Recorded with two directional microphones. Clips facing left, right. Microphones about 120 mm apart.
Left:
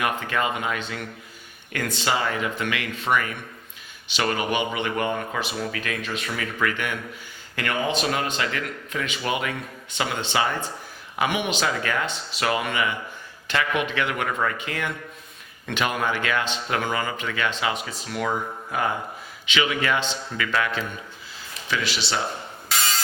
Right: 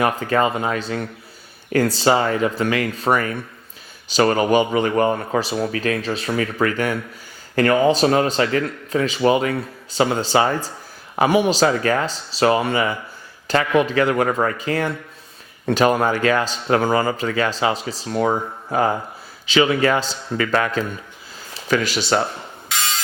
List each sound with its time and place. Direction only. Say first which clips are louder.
0.0 s a man's voice: right 7 dB; 35° right (ahead or behind)